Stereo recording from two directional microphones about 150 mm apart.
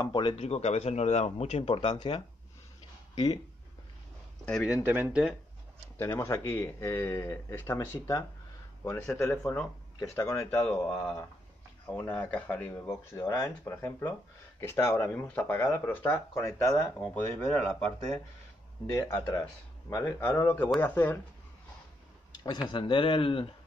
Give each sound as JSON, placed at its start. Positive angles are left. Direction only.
{"t": 0.0, "sound": "speech", "side_deg": 30}
{"t": 4.5, "sound": "speech", "side_deg": 5}
{"t": 4.8, "sound": "speech", "side_deg": -10}
{"t": 5.9, "sound": "speech", "side_deg": 20}
{"t": 18.9, "sound": "speech", "side_deg": 20}
{"t": 22.3, "sound": "a sound", "side_deg": 30}
{"t": 22.7, "sound": "speech", "side_deg": 35}